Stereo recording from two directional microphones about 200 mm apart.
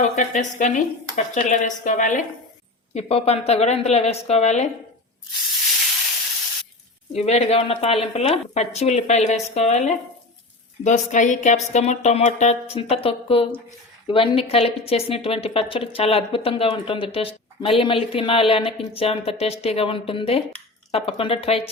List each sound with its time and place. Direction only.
0.2 s speech: 35° left (ahead or behind)
7.1 s a woman's voice: 30° left (ahead or behind)